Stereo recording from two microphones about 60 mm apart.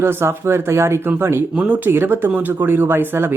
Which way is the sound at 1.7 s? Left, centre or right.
Right.